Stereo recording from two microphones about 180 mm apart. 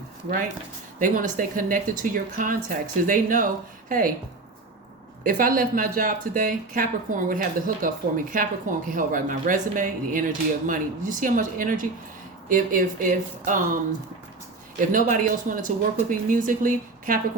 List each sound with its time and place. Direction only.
0.9 s a woman's voice: 50° right (ahead or behind)
5.2 s speech: 50° right (ahead or behind)
14.9 s speech: 50° right (ahead or behind)